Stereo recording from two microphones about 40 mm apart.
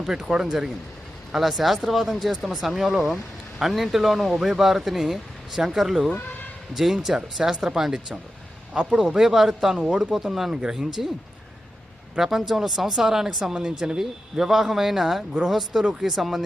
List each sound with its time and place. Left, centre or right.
0.0 s speech: centre
12.2 s speech: centre
13.5 s speech: right; by 15.8 s centre
15.8 s speech: centre
16.0 s speech: centre